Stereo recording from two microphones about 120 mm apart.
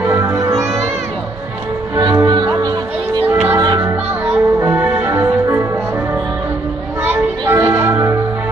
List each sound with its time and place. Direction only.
0.0 s music: 25° right (ahead or behind)
2.0 s music: 30° right (ahead or behind)
3.3 s music: 20° right (ahead or behind)
7.1 s music: 20° right (ahead or behind)